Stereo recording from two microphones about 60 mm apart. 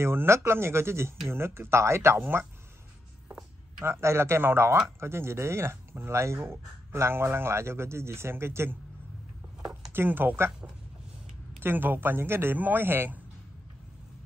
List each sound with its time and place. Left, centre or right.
0.0 s speech: right
3.8 s speech: right
9.9 s speech: right
11.6 s speech: right